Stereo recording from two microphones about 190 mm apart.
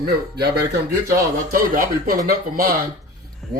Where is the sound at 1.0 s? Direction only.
50° right (ahead or behind).